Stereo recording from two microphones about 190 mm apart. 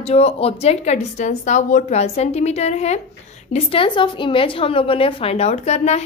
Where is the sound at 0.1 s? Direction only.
30° left (ahead or behind).